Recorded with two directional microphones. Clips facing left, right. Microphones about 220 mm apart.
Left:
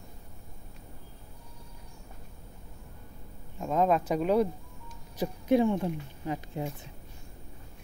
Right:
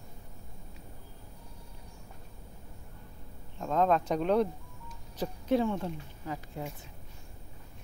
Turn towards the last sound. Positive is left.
turn(degrees=20)  # may be behind; listen again after turning